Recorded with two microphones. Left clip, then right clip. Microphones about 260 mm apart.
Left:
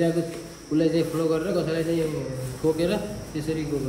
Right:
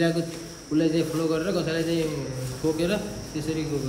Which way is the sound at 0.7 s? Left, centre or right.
Centre.